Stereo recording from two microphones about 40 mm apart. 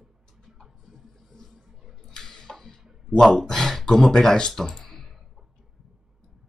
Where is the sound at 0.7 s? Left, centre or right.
Centre.